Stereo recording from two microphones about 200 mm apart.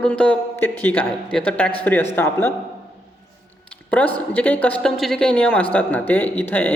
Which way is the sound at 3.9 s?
10° left (ahead or behind).